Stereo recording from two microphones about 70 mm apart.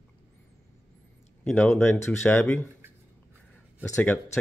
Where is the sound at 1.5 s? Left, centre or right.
Left.